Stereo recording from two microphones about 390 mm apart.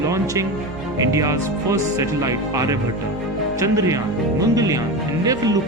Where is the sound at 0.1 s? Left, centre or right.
Centre.